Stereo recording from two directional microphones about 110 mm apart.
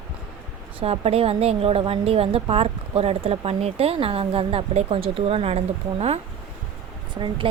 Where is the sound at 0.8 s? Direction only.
65° right (ahead or behind).